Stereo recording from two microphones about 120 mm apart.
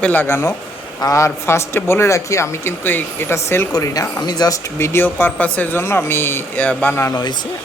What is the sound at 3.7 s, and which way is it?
Speech, 30° left (ahead or behind).